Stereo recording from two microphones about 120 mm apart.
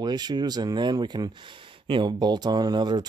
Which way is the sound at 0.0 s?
35° right (ahead or behind).